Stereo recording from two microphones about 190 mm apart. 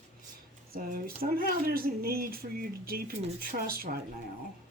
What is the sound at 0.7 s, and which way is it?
Speech, 50° right (ahead or behind).